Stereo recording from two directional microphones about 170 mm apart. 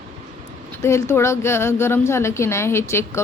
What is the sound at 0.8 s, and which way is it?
A woman's voice, 15° left (ahead or behind).